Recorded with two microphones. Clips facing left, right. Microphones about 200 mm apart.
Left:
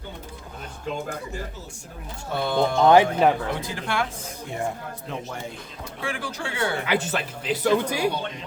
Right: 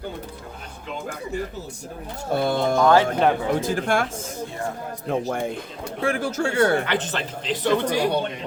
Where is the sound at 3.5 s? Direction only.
45° right (ahead or behind).